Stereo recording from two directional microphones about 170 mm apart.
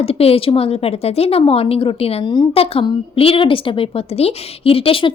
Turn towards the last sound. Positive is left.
turn(degrees=30)  # may be behind; listen again after turning